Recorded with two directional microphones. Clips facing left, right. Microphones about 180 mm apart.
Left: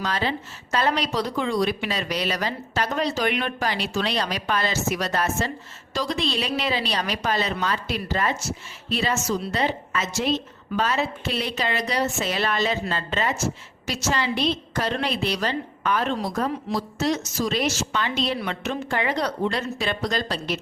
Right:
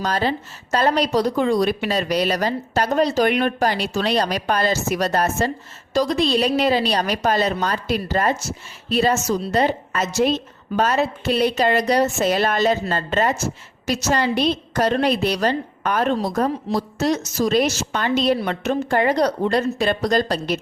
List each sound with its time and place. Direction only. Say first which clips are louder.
0.0 s a woman's voice: right 4 dB; 40° right (ahead or behind)